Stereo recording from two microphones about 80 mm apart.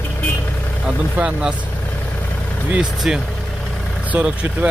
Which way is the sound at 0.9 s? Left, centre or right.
Centre.